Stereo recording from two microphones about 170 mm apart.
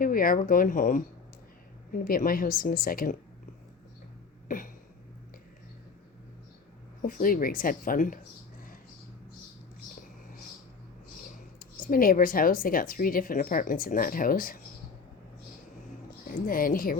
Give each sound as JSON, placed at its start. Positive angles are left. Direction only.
{"t": 0.0, "sound": "speech", "side_deg": 55}
{"t": 4.4, "sound": "a sound", "side_deg": 50}
{"t": 7.0, "sound": "speech", "side_deg": 55}
{"t": 11.6, "sound": "speech", "side_deg": 55}
{"t": 16.0, "sound": "a woman's voice", "side_deg": 55}